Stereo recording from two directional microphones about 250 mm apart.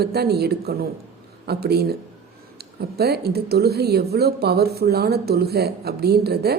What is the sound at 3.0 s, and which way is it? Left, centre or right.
Speech, right.